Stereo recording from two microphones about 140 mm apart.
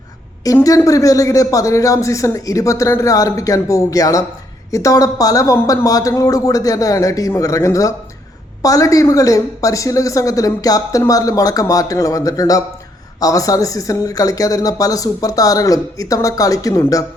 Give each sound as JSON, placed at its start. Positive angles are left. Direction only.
{"t": 0.4, "sound": "a woman's voice", "side_deg": 25}